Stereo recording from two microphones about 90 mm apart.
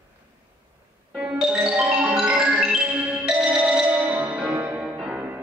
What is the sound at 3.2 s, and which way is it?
Marimba, 10° right (ahead or behind).